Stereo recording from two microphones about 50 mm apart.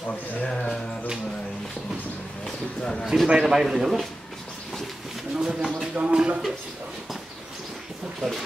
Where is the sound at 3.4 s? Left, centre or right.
Centre.